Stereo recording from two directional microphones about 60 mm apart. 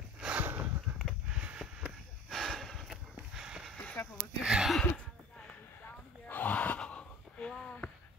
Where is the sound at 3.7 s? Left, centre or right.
Left.